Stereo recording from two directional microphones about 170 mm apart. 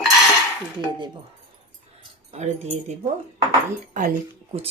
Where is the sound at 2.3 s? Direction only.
45° right (ahead or behind).